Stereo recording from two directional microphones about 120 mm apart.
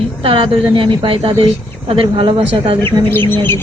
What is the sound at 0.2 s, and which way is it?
Speech, 50° right (ahead or behind).